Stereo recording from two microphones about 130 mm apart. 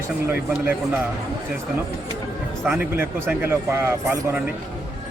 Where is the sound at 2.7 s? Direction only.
10° right (ahead or behind).